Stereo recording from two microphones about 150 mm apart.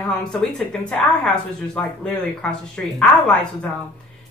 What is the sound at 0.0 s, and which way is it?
Speech, 5° left (ahead or behind).